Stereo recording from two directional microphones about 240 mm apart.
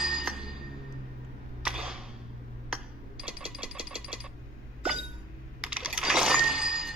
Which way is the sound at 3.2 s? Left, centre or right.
Centre.